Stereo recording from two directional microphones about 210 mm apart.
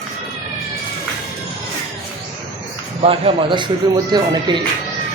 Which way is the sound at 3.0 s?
25° right (ahead or behind).